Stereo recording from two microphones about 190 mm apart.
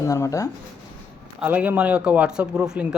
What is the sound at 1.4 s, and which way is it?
Speech, 10° right (ahead or behind).